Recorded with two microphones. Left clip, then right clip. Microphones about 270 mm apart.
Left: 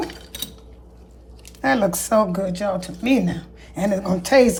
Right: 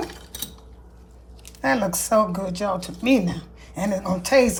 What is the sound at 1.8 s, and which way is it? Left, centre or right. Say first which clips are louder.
Speech: left 2 dB; right.